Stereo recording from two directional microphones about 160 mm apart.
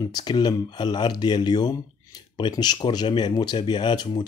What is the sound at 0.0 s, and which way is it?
Speech, 25° left (ahead or behind).